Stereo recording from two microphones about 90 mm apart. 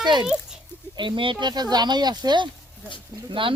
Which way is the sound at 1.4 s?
50° right (ahead or behind).